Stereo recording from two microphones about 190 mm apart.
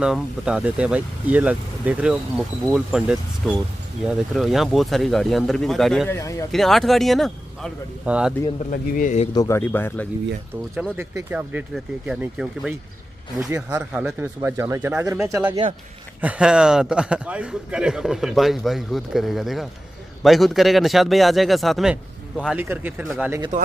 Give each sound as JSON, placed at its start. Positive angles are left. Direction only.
{"t": 0.0, "sound": "a man's voice", "side_deg": -5}
{"t": 6.0, "sound": "speech", "side_deg": 15}
{"t": 6.5, "sound": "a man's voice", "side_deg": 0}
{"t": 8.6, "sound": "speech", "side_deg": 45}
{"t": 9.3, "sound": "speech", "side_deg": 15}
{"t": 11.1, "sound": "speech", "side_deg": -10}
{"t": 16.2, "sound": "a man's voice", "side_deg": -5}
{"t": 23.5, "sound": "speech", "side_deg": -40}